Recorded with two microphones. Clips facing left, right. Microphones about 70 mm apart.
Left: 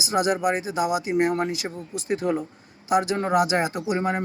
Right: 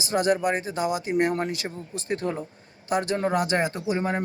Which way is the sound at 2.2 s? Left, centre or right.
Left.